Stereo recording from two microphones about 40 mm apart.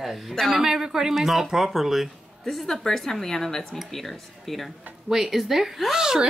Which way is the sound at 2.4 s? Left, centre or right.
Centre.